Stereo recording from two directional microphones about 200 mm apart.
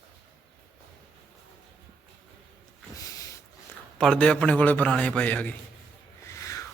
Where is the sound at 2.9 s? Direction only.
15° left (ahead or behind).